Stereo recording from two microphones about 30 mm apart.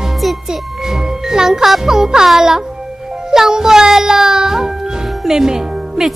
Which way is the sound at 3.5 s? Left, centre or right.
Right.